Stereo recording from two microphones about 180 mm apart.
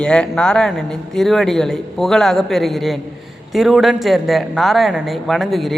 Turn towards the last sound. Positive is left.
turn(degrees=0)  # may be behind; listen again after turning